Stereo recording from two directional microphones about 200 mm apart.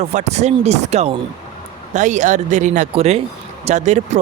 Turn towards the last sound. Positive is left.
turn(degrees=-35)  # may be behind; listen again after turning